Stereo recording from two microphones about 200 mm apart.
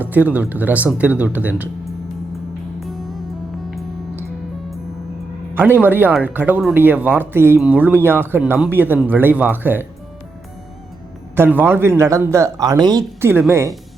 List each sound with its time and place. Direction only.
0.0 s speech: 10° right (ahead or behind)
2.8 s music: centre (ahead or behind)
5.5 s speech: 10° right (ahead or behind)
11.3 s speech: 10° right (ahead or behind)